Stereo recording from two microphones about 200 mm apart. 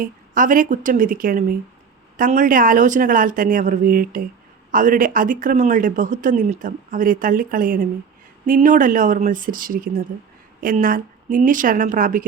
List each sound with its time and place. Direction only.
0.0 s a woman's voice: 40° right (ahead or behind)